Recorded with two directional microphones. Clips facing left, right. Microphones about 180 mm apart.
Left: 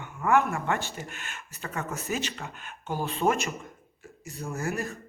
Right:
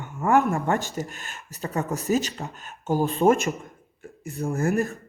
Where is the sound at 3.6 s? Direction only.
55° right (ahead or behind).